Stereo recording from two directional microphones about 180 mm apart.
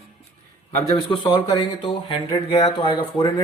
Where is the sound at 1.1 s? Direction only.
30° left (ahead or behind).